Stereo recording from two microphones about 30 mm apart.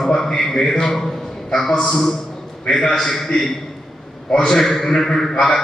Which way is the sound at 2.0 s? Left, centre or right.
Centre.